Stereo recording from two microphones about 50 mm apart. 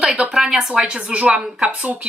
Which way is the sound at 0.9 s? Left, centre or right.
Right.